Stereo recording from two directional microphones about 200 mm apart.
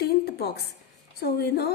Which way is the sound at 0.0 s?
50° left (ahead or behind).